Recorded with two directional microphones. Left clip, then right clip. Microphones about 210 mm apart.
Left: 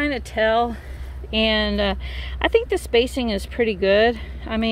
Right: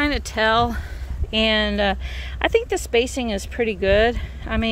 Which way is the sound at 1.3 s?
Centre (ahead or behind).